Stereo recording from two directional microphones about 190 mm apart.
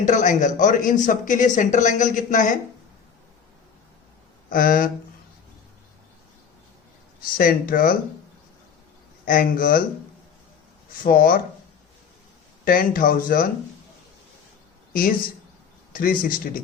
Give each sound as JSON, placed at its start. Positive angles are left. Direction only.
{"t": 0.0, "sound": "speech", "side_deg": 40}
{"t": 4.4, "sound": "speech", "side_deg": 45}
{"t": 7.3, "sound": "speech", "side_deg": 50}
{"t": 9.2, "sound": "speech", "side_deg": 45}
{"t": 11.0, "sound": "speech", "side_deg": 50}
{"t": 12.6, "sound": "speech", "side_deg": 50}
{"t": 15.9, "sound": "speech", "side_deg": 50}